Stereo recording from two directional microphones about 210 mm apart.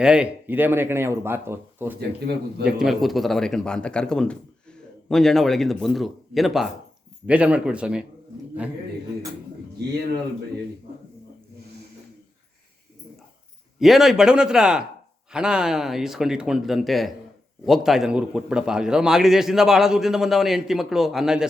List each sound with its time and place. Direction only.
0.0 s a man's voice: 5° right (ahead or behind)
2.0 s a man's voice: 50° right (ahead or behind)
2.6 s a man's voice: centre (ahead or behind)
13.7 s a man's voice: centre (ahead or behind)